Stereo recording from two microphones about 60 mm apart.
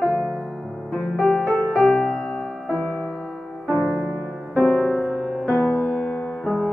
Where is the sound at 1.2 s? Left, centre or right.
Centre.